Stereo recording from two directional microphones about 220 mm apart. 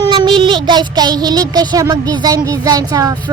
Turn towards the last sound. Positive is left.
turn(degrees=-15)  # may be behind; listen again after turning